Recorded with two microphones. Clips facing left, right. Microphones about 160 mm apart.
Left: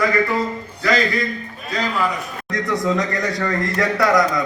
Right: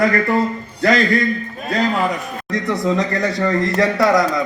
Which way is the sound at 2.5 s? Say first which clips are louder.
Right 2 dB; 25° right (ahead or behind).